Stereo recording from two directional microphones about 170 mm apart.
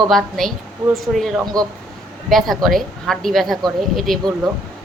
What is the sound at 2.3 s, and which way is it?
Speech, centre (ahead or behind).